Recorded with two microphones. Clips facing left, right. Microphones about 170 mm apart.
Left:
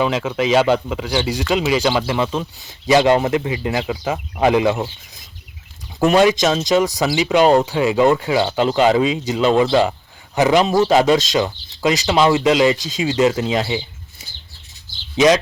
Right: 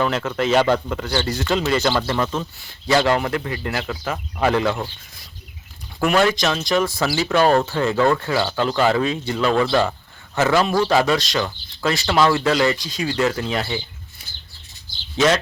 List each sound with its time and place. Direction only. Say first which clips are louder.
0.0 s speech: left 2 dB; 10° left (ahead or behind)
6.0 s speech: left 4 dB; 20° left (ahead or behind)